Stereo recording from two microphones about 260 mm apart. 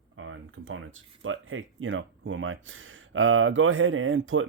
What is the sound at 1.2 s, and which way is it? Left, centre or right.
Speech, right.